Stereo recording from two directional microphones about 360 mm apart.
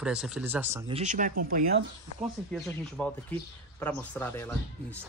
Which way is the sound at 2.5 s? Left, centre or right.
Centre.